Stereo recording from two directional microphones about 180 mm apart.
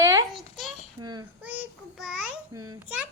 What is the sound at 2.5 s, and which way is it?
Speech, 20° right (ahead or behind).